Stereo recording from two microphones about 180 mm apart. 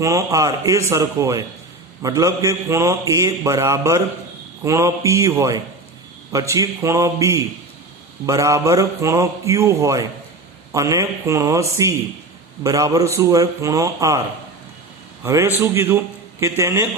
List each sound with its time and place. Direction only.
0.0 s a man's voice: 15° right (ahead or behind)
15.2 s a man's voice: 15° right (ahead or behind)